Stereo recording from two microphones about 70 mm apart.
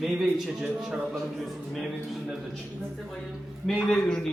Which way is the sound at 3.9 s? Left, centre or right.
Centre.